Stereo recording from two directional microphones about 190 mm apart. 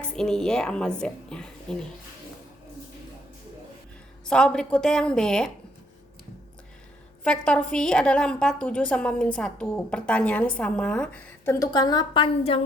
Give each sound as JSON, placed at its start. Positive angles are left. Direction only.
{"t": 0.2, "sound": "a woman's voice", "side_deg": 5}
{"t": 4.3, "sound": "a woman's voice", "side_deg": 5}
{"t": 7.3, "sound": "a woman's voice", "side_deg": 5}
{"t": 11.6, "sound": "a woman's voice", "side_deg": 20}